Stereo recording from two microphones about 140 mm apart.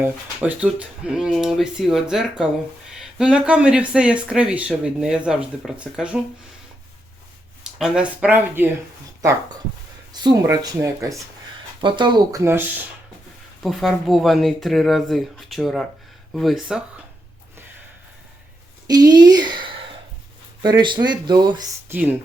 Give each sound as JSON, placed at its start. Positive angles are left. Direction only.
{"t": 0.0, "sound": "speech", "side_deg": -10}
{"t": 7.6, "sound": "speech", "side_deg": -5}
{"t": 10.1, "sound": "speech", "side_deg": -30}
{"t": 11.8, "sound": "speech", "side_deg": -35}
{"t": 12.4, "sound": "speech", "side_deg": -15}
{"t": 13.6, "sound": "speech", "side_deg": 0}
{"t": 18.9, "sound": "a woman's voice", "side_deg": -30}
{"t": 21.8, "sound": "speech", "side_deg": -10}